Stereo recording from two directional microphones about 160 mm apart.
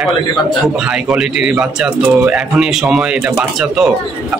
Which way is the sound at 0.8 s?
5° right (ahead or behind).